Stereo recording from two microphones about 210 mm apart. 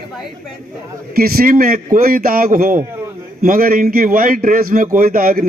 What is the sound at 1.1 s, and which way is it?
A man's voice, 45° right (ahead or behind).